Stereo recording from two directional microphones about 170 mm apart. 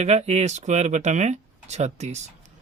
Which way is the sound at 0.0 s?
40° right (ahead or behind).